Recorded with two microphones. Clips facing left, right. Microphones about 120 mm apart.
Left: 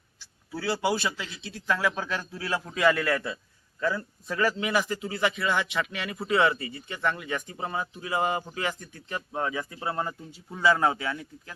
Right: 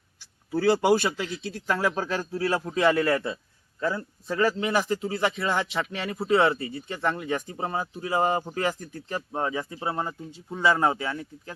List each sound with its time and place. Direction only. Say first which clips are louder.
0.5 s a man's voice: right 7 dB; 50° right (ahead or behind); by 11.5 s 30° right (ahead or behind)